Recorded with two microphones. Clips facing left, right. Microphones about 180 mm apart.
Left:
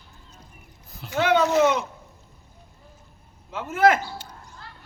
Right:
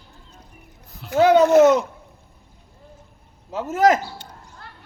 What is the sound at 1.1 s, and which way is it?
Speech, 35° right (ahead or behind).